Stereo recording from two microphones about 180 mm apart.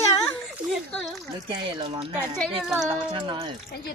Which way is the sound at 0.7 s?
Centre (ahead or behind).